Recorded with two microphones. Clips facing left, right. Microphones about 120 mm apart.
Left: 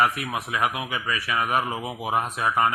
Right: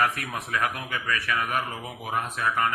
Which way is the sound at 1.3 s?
40° left (ahead or behind).